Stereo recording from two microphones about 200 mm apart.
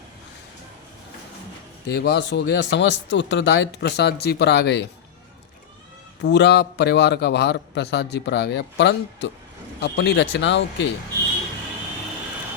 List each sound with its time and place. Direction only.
1.9 s a man's voice: 55° left (ahead or behind)
6.2 s a man's voice: 60° left (ahead or behind)